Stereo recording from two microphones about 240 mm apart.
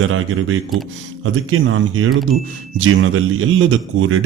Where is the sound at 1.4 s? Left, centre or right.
Right.